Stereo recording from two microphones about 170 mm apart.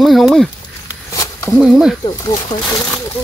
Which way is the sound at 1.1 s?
15° left (ahead or behind).